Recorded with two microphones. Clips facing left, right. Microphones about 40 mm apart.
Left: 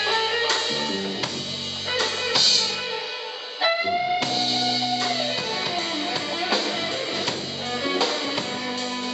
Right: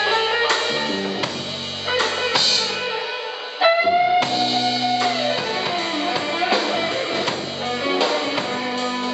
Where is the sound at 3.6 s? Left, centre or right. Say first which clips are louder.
Right 7 dB; centre.